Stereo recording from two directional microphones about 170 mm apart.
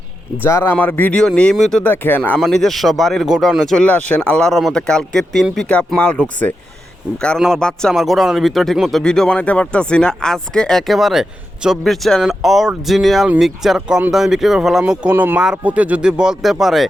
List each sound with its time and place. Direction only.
0.4 s speech: 15° left (ahead or behind); by 16.9 s centre (ahead or behind)